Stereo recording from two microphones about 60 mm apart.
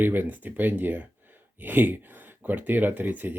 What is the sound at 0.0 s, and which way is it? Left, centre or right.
Speech, right.